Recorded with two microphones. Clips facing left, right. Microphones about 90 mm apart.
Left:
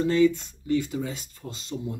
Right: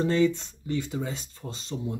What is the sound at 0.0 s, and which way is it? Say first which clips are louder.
Speech: left 2 dB; 30° right (ahead or behind).